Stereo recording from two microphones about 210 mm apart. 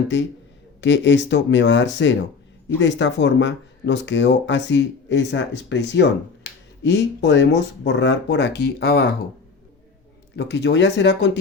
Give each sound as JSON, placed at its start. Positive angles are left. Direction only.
{"t": 0.1, "sound": "speech", "side_deg": 55}
{"t": 10.3, "sound": "speech", "side_deg": 55}